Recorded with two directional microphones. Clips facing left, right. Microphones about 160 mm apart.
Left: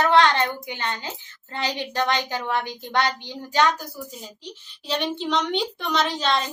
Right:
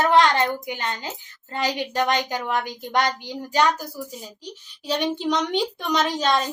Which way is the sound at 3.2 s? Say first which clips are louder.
Right 1 dB; 10° right (ahead or behind).